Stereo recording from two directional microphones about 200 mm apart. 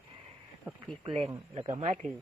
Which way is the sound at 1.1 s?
25° right (ahead or behind).